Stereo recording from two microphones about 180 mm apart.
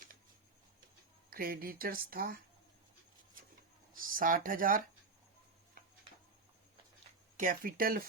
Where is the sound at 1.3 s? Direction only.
55° right (ahead or behind).